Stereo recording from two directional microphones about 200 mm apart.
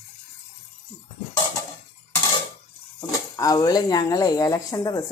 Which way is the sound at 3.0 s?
20° left (ahead or behind).